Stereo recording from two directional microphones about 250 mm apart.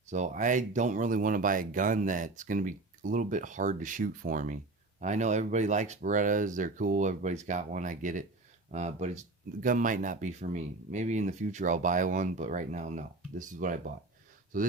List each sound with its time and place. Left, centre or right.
0.1 s speech: right